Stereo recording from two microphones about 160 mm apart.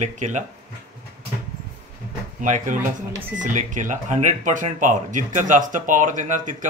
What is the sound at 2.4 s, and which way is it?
A man's voice, 50° right (ahead or behind).